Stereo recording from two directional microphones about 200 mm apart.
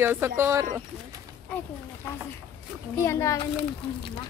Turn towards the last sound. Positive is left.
turn(degrees=15)  # may be behind; listen again after turning